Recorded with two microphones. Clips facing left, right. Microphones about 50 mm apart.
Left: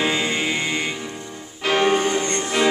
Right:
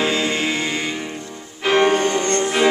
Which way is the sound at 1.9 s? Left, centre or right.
Centre.